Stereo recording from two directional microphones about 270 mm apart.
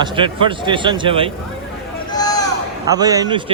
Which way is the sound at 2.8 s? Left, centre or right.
Centre.